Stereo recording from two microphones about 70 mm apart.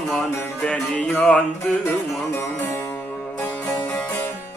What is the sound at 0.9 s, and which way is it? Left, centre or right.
Music, left.